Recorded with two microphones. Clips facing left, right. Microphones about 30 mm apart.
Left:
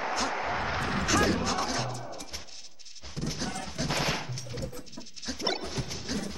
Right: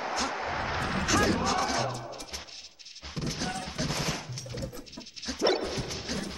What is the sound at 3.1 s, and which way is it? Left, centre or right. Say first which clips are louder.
Smash: right 1 dB; centre.